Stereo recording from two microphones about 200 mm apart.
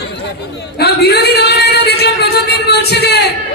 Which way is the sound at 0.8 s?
55° left (ahead or behind).